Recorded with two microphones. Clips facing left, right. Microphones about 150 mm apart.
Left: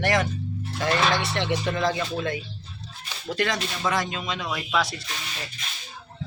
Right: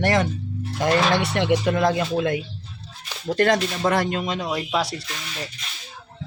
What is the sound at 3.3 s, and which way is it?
Speech, 50° right (ahead or behind).